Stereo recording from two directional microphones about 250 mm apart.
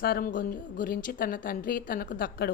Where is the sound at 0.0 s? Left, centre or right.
Left.